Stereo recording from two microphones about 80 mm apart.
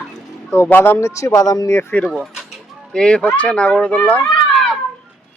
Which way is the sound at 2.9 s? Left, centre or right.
Centre.